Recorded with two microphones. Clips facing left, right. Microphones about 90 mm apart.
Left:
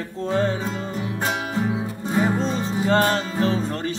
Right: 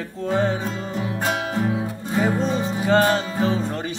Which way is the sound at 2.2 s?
Centre (ahead or behind).